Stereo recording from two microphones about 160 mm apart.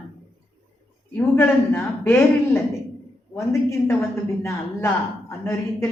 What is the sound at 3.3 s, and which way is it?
Speech, 15° left (ahead or behind).